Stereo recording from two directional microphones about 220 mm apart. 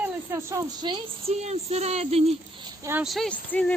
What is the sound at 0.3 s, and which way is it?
A woman's voice, 15° right (ahead or behind).